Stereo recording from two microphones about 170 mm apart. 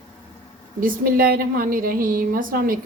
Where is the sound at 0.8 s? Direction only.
60° right (ahead or behind).